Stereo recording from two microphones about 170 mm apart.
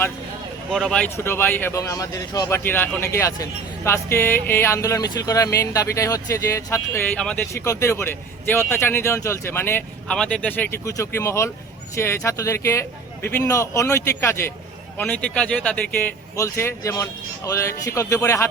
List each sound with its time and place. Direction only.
0.7 s speech: 5° left (ahead or behind)